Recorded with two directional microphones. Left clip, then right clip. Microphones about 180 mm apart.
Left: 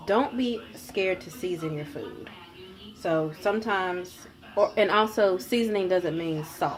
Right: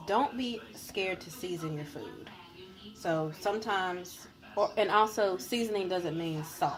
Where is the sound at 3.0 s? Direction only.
15° left (ahead or behind).